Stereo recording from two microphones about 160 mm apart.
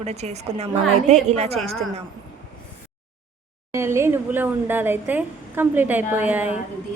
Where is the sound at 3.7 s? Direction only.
15° right (ahead or behind).